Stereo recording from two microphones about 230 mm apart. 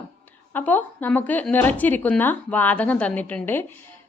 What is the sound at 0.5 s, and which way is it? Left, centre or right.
A woman's voice, centre.